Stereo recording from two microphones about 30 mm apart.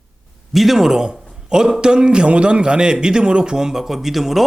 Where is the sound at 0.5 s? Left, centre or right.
Centre.